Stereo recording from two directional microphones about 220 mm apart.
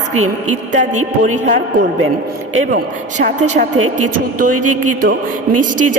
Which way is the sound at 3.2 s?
35° right (ahead or behind).